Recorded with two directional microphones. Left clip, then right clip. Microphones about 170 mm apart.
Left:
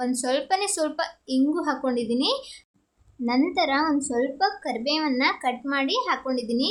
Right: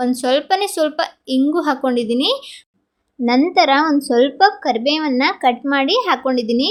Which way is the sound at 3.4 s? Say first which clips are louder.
Right 9 dB; 35° right (ahead or behind).